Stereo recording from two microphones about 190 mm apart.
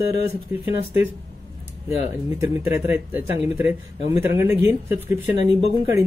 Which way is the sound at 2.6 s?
15° right (ahead or behind).